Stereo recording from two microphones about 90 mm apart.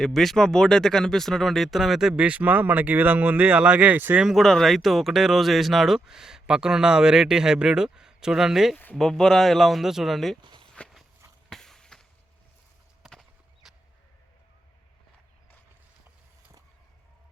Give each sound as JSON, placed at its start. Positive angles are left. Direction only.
{"t": 0.0, "sound": "speech", "side_deg": 5}
{"t": 4.2, "sound": "speech", "side_deg": 0}
{"t": 8.7, "sound": "speech", "side_deg": 20}
{"t": 9.0, "sound": "speech", "side_deg": 5}
{"t": 10.4, "sound": "walk", "side_deg": -60}
{"t": 10.8, "sound": "walk", "side_deg": 5}
{"t": 11.4, "sound": "a sound", "side_deg": 5}
{"t": 13.0, "sound": "clip-clop", "side_deg": 0}